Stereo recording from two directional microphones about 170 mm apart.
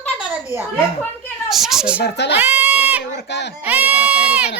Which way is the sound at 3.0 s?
90° left.